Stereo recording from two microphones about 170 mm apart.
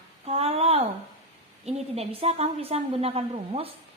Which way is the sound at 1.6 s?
40° right (ahead or behind).